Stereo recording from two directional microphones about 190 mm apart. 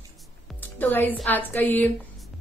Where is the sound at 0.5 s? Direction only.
10° left (ahead or behind).